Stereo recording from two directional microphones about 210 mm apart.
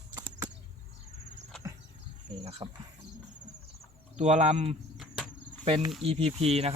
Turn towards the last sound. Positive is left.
turn(degrees=-30)  # may be behind; listen again after turning